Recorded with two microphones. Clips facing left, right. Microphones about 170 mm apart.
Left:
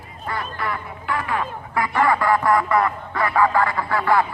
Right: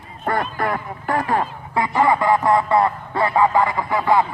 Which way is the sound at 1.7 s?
20° right (ahead or behind).